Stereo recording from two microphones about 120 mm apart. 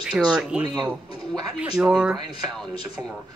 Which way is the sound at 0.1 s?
5° right (ahead or behind).